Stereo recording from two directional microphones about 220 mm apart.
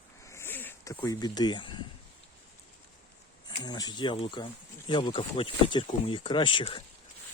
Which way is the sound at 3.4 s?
20° left (ahead or behind).